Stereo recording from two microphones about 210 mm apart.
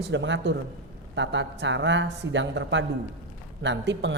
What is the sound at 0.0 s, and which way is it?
Speech, 60° right (ahead or behind).